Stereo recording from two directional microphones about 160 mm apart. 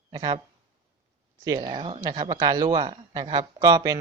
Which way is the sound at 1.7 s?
30° right (ahead or behind).